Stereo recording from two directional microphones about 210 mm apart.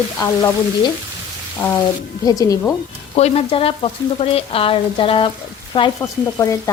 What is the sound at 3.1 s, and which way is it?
Frying, 30° left (ahead or behind).